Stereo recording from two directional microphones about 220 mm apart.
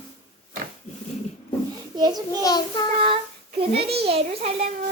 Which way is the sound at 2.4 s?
20° left (ahead or behind).